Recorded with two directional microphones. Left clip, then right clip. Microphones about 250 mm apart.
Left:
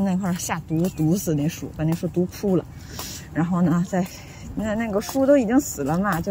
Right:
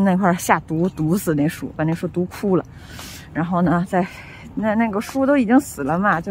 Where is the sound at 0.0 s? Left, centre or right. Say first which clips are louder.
Right 9 dB; right.